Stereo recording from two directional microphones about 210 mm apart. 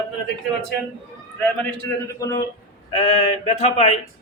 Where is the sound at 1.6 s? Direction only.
15° left (ahead or behind).